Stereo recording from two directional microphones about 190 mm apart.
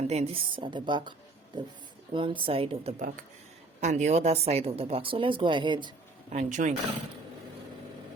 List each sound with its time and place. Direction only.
0.1 s a woman's voice: 30° right (ahead or behind)
2.1 s a woman's voice: 25° right (ahead or behind)
6.3 s speech: 40° right (ahead or behind)